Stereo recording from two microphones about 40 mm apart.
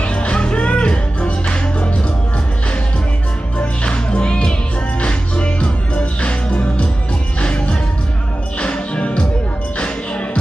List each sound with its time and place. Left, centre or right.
0.0 s music: left
3.5 s music: left